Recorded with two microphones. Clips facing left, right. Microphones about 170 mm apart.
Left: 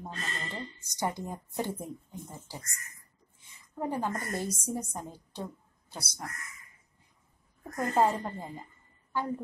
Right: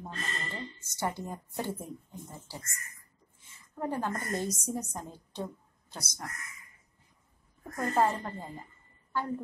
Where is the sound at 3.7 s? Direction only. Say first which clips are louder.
Left 1 dB; 15° left (ahead or behind).